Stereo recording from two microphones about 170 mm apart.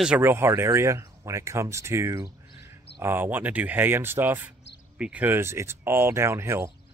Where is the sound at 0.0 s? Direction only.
10° right (ahead or behind).